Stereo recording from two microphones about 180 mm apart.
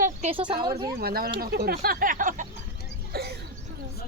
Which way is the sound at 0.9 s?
55° right (ahead or behind).